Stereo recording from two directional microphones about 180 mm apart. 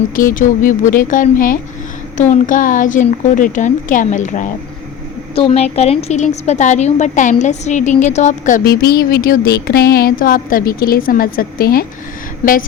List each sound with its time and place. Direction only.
0.3 s a woman's voice: 50° left (ahead or behind)
5.3 s a woman's voice: 35° left (ahead or behind); by 11.9 s 55° left (ahead or behind)